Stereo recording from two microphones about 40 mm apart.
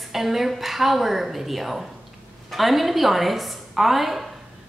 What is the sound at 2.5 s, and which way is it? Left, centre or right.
A woman's voice, centre.